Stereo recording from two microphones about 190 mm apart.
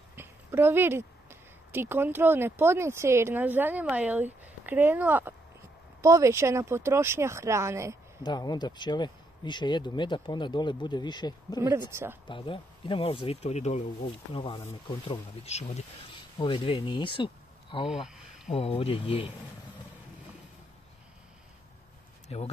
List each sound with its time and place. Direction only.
0.1 s speech: 10° right (ahead or behind)
8.2 s speech: 20° left (ahead or behind)
11.9 s speech: 10° right (ahead or behind)
12.3 s speech: 25° left (ahead or behind)
17.8 s a sound: centre (ahead or behind)
18.5 s speech: 30° left (ahead or behind)